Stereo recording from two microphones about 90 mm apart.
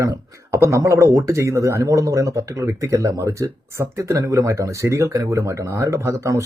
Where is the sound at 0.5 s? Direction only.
30° right (ahead or behind).